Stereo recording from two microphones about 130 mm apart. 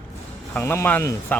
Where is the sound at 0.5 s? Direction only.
15° left (ahead or behind).